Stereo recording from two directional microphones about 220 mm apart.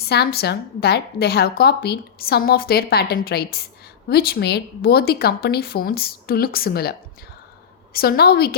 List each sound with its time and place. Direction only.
0.0 s a woman's voice: 45° left (ahead or behind)
7.9 s a woman's voice: 45° left (ahead or behind)